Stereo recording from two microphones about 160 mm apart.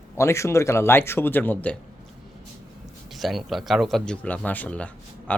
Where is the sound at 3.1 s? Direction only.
Centre (ahead or behind).